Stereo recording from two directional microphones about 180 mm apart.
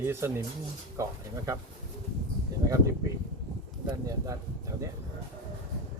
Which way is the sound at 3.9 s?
20° right (ahead or behind).